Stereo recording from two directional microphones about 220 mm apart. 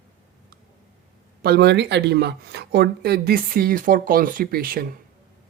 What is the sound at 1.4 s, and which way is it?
Speech, 50° right (ahead or behind).